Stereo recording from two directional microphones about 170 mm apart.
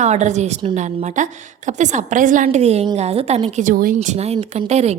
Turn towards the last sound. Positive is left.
turn(degrees=-40)  # may be behind; listen again after turning